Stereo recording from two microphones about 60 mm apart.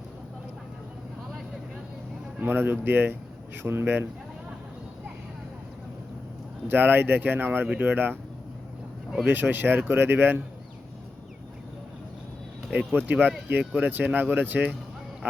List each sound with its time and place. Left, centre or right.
2.4 s speech: right
6.7 s speech: right
9.2 s speech: right
12.9 s speech: right